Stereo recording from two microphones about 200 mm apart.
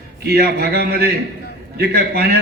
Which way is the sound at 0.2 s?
50° right (ahead or behind).